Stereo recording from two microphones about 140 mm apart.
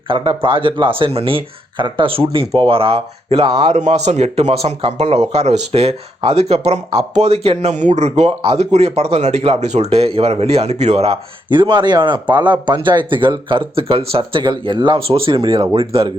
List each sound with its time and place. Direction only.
0.1 s speech: 35° right (ahead or behind)